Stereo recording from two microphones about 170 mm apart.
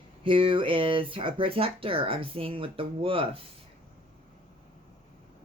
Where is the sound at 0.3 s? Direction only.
30° right (ahead or behind).